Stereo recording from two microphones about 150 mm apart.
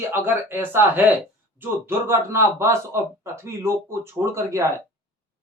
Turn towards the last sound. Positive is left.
turn(degrees=-15)  # may be behind; listen again after turning